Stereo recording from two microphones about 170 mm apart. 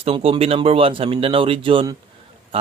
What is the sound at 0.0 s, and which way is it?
Speech, 35° right (ahead or behind).